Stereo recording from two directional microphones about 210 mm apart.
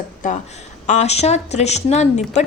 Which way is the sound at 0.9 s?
35° left (ahead or behind).